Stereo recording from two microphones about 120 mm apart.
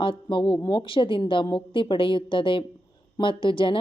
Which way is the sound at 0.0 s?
45° left (ahead or behind).